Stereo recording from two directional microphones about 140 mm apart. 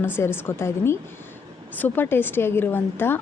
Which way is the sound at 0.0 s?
15° left (ahead or behind).